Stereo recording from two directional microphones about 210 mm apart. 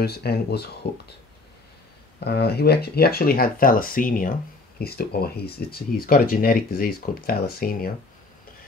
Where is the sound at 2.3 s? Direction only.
50° left (ahead or behind).